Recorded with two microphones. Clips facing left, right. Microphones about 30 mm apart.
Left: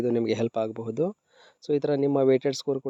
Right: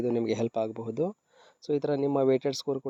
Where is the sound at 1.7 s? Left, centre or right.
Left.